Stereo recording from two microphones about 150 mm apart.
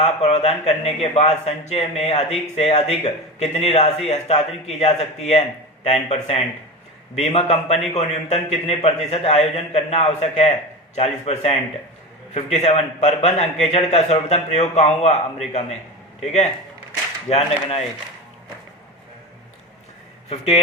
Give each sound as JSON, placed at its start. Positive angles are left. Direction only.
{"t": 0.0, "sound": "a man's voice", "side_deg": 45}
{"t": 16.2, "sound": "a man's voice", "side_deg": 45}
{"t": 20.3, "sound": "speech", "side_deg": 40}